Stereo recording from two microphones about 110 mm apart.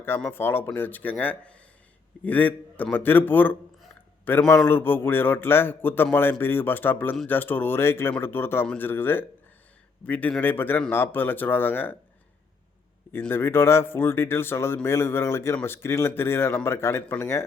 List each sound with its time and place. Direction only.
0.0 s a man's voice: 20° left (ahead or behind)
13.1 s speech: 20° left (ahead or behind)